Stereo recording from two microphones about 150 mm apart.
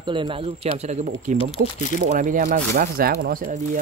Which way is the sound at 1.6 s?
60° right (ahead or behind).